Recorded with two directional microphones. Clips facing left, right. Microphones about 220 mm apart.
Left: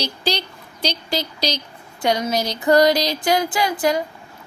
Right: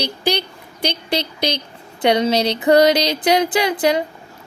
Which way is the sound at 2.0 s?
25° right (ahead or behind).